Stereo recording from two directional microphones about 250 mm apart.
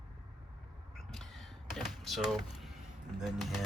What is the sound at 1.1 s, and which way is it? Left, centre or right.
Door, centre.